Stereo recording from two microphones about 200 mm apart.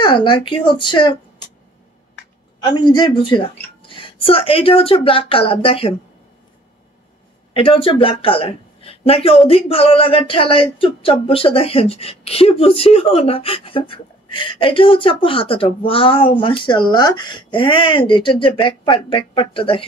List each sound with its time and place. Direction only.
0.0 s speech: 25° left (ahead or behind)
2.6 s speech: 20° left (ahead or behind)
7.5 s speech: 25° left (ahead or behind)